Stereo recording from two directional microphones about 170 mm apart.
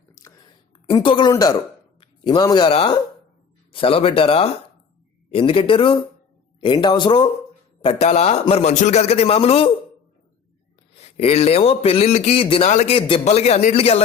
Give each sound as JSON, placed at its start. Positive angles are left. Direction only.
{"t": 0.1, "sound": "a sound", "side_deg": 20}
{"t": 3.7, "sound": "speech", "side_deg": 30}
{"t": 10.9, "sound": "speech", "side_deg": 35}